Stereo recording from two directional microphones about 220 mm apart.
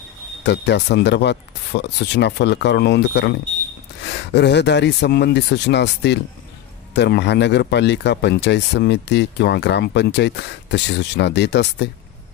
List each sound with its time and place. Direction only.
0.4 s speech: 50° left (ahead or behind)